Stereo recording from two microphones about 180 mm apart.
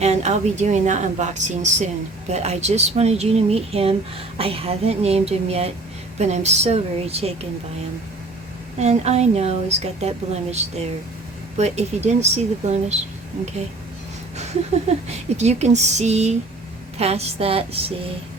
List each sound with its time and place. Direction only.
0.0 s a woman's voice: 40° right (ahead or behind)
8.8 s a woman's voice: 35° right (ahead or behind)
15.4 s a woman's voice: 40° right (ahead or behind)